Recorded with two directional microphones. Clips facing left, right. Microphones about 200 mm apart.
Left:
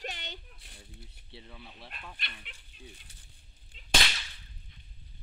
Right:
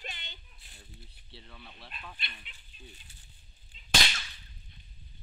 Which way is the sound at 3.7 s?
60° left (ahead or behind).